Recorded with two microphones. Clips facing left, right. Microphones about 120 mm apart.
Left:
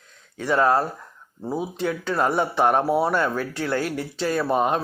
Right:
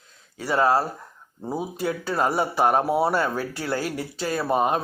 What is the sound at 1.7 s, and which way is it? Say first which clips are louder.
Speech: left 1 dB; 40° right (ahead or behind).